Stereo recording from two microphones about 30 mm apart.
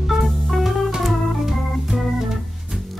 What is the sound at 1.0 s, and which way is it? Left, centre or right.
Organ, centre.